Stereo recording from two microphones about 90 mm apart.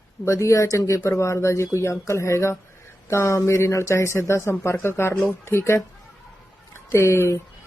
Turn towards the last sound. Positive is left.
turn(degrees=30)  # may be behind; listen again after turning